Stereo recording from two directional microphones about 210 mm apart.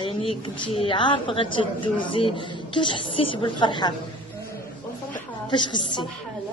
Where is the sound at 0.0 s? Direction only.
25° left (ahead or behind).